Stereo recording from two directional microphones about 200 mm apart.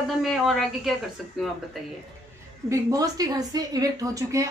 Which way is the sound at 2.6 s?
15° right (ahead or behind).